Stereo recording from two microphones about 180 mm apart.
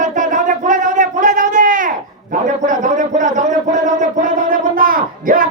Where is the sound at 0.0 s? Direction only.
45° right (ahead or behind).